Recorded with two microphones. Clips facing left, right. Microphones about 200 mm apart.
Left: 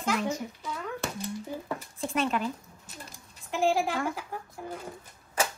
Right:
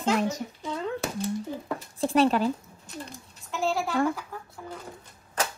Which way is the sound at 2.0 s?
35° right (ahead or behind).